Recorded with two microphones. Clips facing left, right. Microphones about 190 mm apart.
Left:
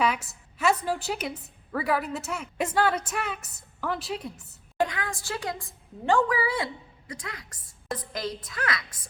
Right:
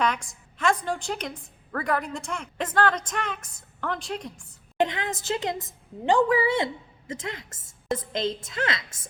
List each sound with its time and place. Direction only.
0.0 s a woman's voice: 5° left (ahead or behind)
4.8 s a woman's voice: 20° right (ahead or behind)